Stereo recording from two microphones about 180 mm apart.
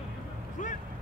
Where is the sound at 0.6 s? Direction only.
45° left (ahead or behind).